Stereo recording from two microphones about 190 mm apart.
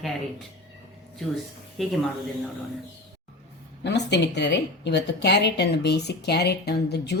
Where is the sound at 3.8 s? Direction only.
65° left (ahead or behind).